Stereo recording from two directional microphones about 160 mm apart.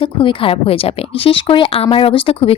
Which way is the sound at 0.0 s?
35° left (ahead or behind).